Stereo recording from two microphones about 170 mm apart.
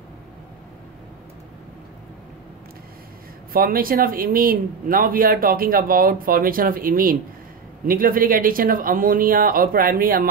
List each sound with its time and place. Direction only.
3.5 s speech: 60° right (ahead or behind)